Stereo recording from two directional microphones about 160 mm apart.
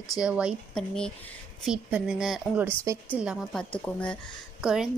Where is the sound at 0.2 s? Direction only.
5° right (ahead or behind).